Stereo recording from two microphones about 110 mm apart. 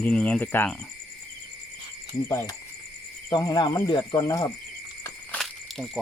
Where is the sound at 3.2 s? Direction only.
35° left (ahead or behind).